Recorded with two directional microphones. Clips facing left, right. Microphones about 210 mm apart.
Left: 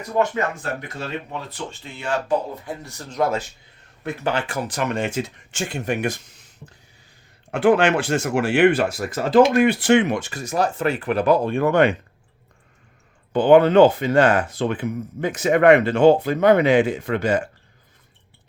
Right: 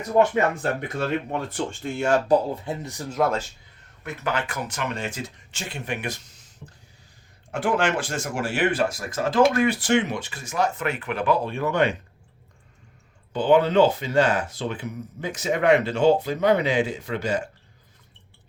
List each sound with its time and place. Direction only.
1.3 s speech: 50° right (ahead or behind)
2.6 s speech: 20° right (ahead or behind)
3.1 s speech: centre (ahead or behind)
4.0 s speech: 30° left (ahead or behind)
4.8 s speech: 50° left (ahead or behind)
7.5 s speech: 65° left (ahead or behind)
13.3 s speech: 55° left (ahead or behind)